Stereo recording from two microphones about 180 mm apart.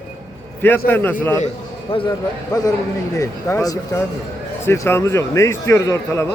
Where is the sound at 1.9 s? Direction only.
25° left (ahead or behind).